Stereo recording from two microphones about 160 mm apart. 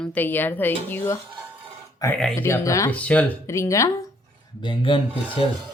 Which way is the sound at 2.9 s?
10° left (ahead or behind).